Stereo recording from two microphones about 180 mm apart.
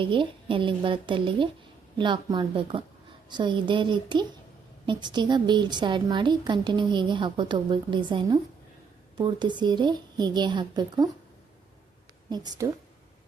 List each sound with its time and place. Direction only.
0.0 s a woman's voice: 30° right (ahead or behind)
12.3 s a woman's voice: 20° right (ahead or behind)